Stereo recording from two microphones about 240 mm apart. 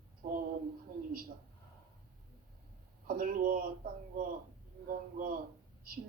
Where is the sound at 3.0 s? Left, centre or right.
Right.